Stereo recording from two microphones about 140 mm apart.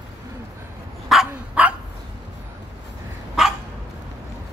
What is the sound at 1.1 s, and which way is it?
Dog, 5° right (ahead or behind).